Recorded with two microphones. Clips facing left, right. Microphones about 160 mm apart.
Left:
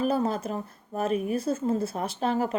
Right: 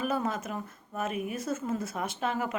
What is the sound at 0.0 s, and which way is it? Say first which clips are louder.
Speech: left 5 dB; 35° left (ahead or behind).